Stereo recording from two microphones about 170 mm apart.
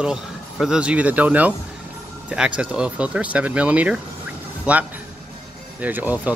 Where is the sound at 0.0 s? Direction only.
5° right (ahead or behind).